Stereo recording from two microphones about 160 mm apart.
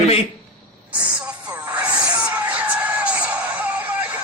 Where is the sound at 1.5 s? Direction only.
10° right (ahead or behind).